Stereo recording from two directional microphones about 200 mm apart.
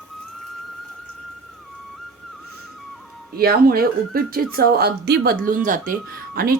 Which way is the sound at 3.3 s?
50° right (ahead or behind).